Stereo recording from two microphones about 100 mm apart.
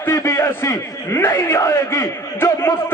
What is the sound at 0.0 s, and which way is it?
A man's voice, 25° left (ahead or behind).